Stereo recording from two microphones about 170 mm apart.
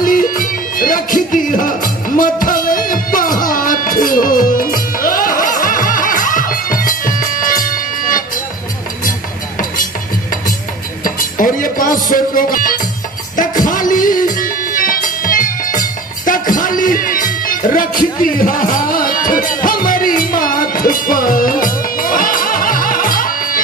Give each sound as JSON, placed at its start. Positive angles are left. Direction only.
{"t": 0.0, "sound": "music", "side_deg": 55}
{"t": 11.1, "sound": "music", "side_deg": 55}